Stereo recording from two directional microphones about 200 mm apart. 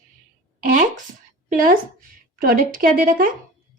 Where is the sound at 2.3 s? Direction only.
45° right (ahead or behind).